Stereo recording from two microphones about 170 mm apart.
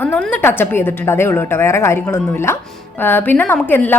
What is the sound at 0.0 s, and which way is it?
A woman's voice, 10° left (ahead or behind).